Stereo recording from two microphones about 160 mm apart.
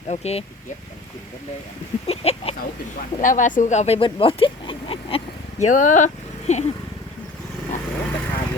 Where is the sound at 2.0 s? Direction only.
40° left (ahead or behind).